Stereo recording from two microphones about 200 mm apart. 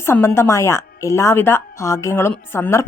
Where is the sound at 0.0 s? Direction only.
10° left (ahead or behind).